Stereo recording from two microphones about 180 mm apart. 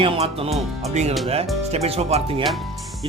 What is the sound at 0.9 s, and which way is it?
Speech, 35° right (ahead or behind).